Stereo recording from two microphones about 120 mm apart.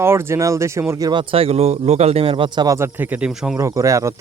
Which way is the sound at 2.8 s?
15° right (ahead or behind).